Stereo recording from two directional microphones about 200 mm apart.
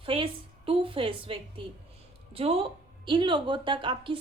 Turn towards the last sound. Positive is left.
turn(degrees=-25)  # may be behind; listen again after turning